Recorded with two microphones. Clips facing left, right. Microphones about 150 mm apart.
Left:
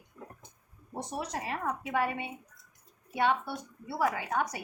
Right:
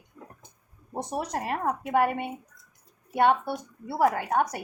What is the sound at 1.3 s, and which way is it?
A woman's voice, 50° right (ahead or behind).